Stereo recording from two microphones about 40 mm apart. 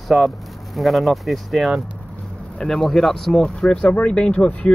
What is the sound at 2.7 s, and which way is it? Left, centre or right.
Speech, centre.